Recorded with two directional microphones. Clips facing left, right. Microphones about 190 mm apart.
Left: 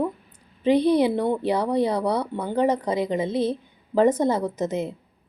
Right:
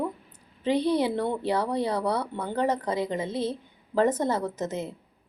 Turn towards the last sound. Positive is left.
turn(degrees=15)  # may be behind; listen again after turning